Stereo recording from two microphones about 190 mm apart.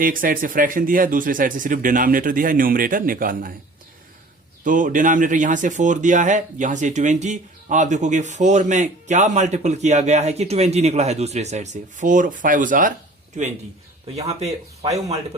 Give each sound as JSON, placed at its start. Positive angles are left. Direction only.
{"t": 0.0, "sound": "speech", "side_deg": -45}
{"t": 4.6, "sound": "speech", "side_deg": -45}